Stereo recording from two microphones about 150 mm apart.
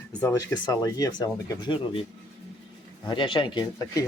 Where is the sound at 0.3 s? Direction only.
25° left (ahead or behind).